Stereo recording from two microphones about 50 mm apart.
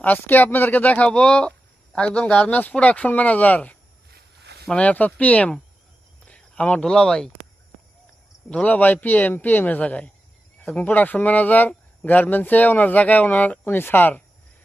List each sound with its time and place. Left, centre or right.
0.0 s speech: left
1.1 s speech: left
2.5 s speech: left
4.8 s speech: left
6.2 s a sound: left
6.8 s speech: centre
8.4 s speech: left
8.7 s speech: left